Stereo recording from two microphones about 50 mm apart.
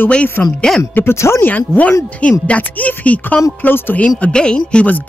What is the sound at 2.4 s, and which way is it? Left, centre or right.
Speech, left.